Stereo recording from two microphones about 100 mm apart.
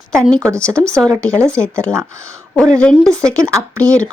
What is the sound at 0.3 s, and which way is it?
Speech, 35° right (ahead or behind).